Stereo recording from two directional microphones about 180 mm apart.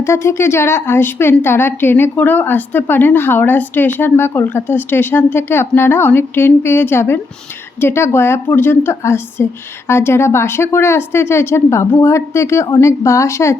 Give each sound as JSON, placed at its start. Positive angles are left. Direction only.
{"t": 0.0, "sound": "a woman's voice", "side_deg": 15}